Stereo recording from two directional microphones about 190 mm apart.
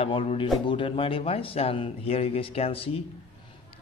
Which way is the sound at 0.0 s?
30° left (ahead or behind).